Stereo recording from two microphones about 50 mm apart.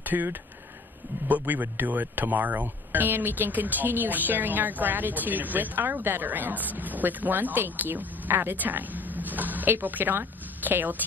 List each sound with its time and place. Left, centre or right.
0.0 s speech: right